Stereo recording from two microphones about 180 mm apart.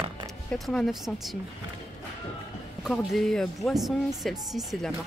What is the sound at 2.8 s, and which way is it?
Speech, centre (ahead or behind).